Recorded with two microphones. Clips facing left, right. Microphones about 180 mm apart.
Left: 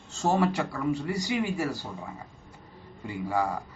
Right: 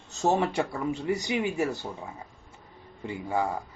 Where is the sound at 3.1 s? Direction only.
25° right (ahead or behind).